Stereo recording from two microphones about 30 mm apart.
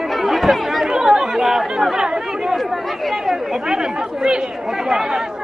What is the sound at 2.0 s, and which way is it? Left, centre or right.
Chatter, right.